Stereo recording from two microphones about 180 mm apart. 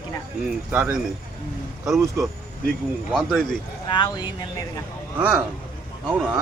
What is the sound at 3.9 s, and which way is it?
Speech, 25° left (ahead or behind).